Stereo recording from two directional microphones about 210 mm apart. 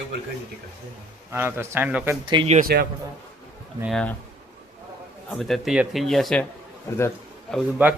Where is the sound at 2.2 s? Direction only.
20° right (ahead or behind).